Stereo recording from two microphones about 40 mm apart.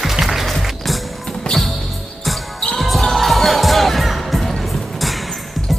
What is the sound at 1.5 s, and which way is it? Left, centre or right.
Music, left.